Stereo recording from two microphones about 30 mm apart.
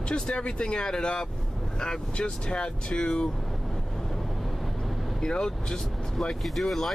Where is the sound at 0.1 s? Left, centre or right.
Left.